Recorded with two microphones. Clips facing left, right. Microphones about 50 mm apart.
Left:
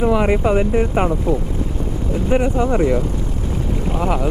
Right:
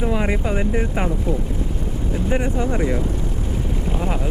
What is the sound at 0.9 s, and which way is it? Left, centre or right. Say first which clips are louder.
Speech: left 5 dB; left.